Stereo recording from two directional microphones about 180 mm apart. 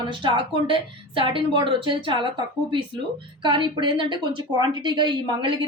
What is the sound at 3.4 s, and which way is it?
A woman's voice, 25° right (ahead or behind).